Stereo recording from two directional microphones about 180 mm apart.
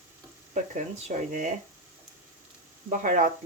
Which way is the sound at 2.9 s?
45° right (ahead or behind).